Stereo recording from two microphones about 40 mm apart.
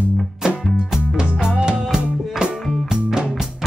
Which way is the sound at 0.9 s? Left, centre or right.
Centre.